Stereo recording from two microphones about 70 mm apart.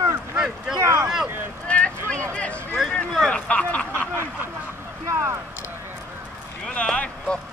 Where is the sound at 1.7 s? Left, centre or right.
Centre.